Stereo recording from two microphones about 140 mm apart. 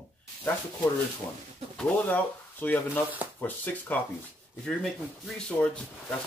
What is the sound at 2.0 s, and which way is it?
Speech, 15° left (ahead or behind).